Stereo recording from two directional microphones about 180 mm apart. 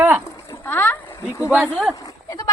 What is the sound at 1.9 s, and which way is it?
Goat, 20° left (ahead or behind).